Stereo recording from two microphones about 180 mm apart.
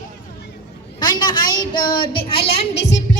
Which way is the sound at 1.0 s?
25° left (ahead or behind).